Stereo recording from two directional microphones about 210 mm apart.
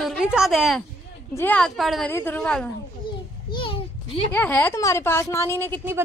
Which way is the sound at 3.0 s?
25° left (ahead or behind).